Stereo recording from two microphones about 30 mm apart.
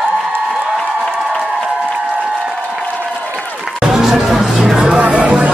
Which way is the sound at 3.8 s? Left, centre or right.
Centre.